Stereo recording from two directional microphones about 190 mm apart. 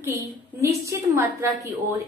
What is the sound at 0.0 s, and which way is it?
A woman's voice, 15° right (ahead or behind).